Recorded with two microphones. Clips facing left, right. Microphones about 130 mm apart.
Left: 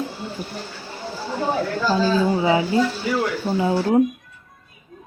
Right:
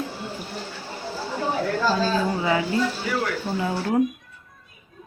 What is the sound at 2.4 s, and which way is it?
Speech, 20° left (ahead or behind).